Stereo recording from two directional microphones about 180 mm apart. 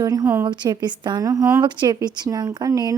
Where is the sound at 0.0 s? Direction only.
20° right (ahead or behind).